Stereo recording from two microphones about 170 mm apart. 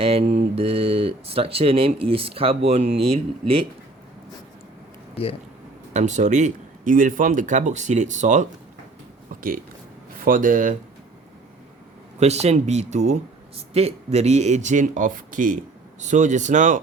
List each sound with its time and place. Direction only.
0.0 s speech: 35° right (ahead or behind)
5.9 s speech: 45° right (ahead or behind)
12.2 s speech: 40° right (ahead or behind)